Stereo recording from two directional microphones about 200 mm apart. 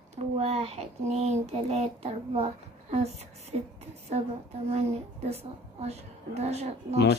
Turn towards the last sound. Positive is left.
turn(degrees=-35)  # may be behind; listen again after turning